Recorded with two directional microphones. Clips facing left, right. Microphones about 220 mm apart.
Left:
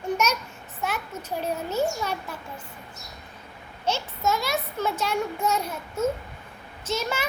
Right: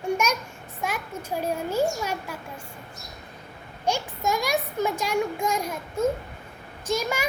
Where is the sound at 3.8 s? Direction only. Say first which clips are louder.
Even; 15° right (ahead or behind).